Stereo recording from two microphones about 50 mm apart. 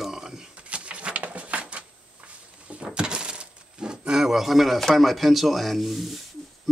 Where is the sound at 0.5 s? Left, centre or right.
Right.